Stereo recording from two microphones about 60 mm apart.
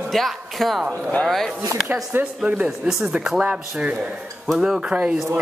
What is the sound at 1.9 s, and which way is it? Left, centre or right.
Speech, right.